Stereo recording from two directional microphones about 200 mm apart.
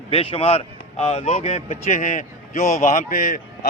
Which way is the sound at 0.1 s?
30° left (ahead or behind).